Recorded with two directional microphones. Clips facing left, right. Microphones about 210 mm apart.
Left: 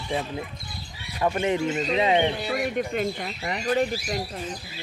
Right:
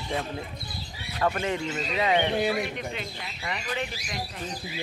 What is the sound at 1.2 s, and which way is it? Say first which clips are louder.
Speech: left 4 dB; 20° left (ahead or behind).